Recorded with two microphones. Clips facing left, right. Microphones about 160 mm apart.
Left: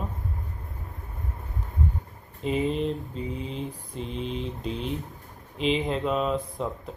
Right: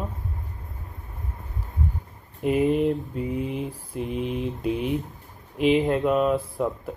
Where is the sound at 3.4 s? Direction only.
10° right (ahead or behind).